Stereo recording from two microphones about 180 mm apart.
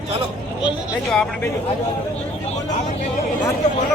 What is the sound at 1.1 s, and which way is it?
Speech, 5° left (ahead or behind).